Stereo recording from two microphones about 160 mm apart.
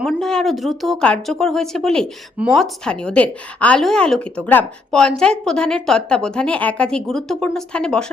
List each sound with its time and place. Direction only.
0.0 s a woman's voice: 5° left (ahead or behind)